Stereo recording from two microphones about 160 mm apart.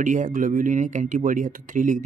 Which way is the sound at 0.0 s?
55° right (ahead or behind).